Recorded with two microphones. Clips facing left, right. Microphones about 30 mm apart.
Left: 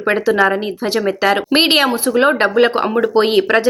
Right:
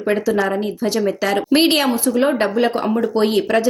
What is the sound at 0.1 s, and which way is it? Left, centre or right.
Speech, left.